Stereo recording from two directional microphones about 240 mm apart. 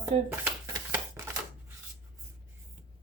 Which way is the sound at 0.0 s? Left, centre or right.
Centre.